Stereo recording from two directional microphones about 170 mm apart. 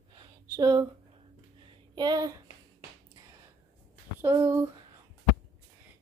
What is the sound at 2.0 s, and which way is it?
Speech, 20° right (ahead or behind).